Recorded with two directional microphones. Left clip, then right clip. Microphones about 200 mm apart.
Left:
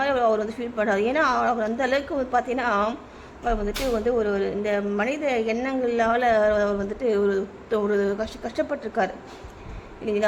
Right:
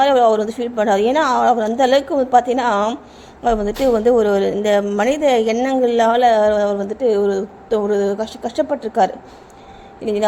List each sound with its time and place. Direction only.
0.0 s a woman's voice: 20° right (ahead or behind)